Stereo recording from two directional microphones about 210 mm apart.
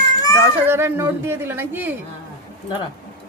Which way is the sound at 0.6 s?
10° right (ahead or behind).